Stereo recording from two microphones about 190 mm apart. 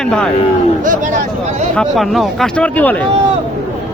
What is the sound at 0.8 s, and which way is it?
Speech, 40° right (ahead or behind).